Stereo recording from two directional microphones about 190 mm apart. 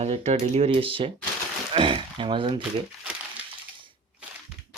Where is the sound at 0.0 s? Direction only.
35° right (ahead or behind).